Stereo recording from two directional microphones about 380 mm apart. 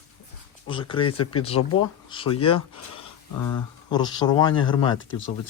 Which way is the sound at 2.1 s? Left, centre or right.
Centre.